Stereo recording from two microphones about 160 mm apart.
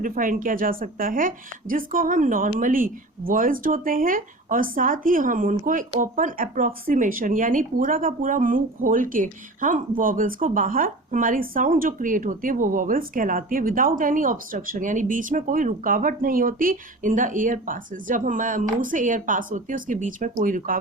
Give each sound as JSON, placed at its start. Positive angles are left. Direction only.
{"t": 0.0, "sound": "speech", "side_deg": -60}